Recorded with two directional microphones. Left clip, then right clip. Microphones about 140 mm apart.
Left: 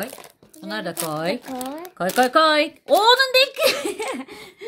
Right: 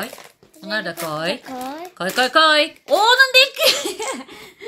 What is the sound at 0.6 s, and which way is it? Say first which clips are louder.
Speech: right 4 dB; 50° left (ahead or behind).